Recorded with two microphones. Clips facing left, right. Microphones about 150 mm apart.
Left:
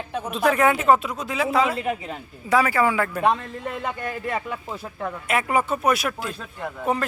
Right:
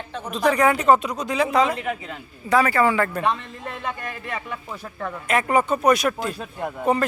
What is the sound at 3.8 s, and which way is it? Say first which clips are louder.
Speech: left 1 dB; 35° left (ahead or behind).